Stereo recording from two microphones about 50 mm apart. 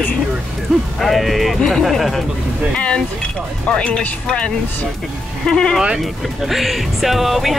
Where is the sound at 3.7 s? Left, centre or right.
Left.